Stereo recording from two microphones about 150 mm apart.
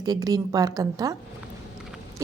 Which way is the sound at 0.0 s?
25° right (ahead or behind).